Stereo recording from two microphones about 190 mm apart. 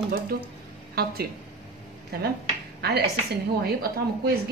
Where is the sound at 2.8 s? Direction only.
60° right (ahead or behind).